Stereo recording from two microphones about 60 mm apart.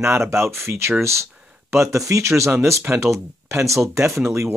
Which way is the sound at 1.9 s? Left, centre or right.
Right.